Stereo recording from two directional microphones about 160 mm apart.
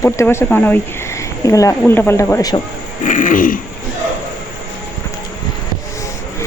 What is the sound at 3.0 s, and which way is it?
Throat clearing, 55° left (ahead or behind).